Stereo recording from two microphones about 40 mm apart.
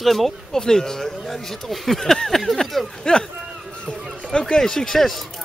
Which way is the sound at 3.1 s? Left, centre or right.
Left.